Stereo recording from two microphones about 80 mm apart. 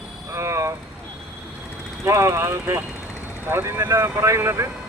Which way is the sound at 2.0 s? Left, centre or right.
Right.